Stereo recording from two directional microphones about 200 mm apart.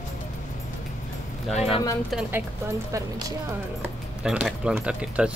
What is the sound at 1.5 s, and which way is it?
Speech, 30° left (ahead or behind).